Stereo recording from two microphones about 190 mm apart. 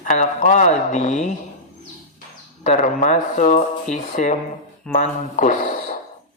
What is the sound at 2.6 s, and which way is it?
Speech, 40° left (ahead or behind).